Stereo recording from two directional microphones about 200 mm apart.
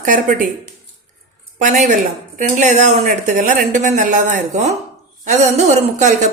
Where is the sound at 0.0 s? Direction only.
40° right (ahead or behind).